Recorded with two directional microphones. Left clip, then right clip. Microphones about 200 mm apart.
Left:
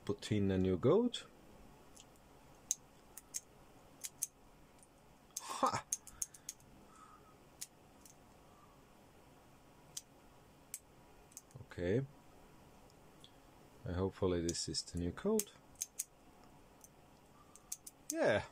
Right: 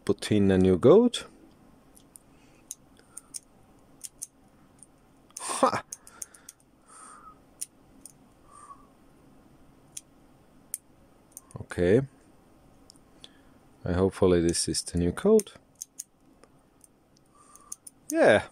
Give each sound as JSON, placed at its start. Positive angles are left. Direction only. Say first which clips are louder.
{"t": 0.0, "sound": "speech", "louder": "right 13 dB", "side_deg": -55}
{"t": 5.4, "sound": "a sound", "louder": "right 11 dB", "side_deg": -55}
{"t": 11.7, "sound": "speech", "louder": "right 15 dB", "side_deg": -55}
{"t": 13.8, "sound": "speech", "louder": "right 14 dB", "side_deg": -55}
{"t": 18.1, "sound": "speech", "louder": "right 14 dB", "side_deg": -55}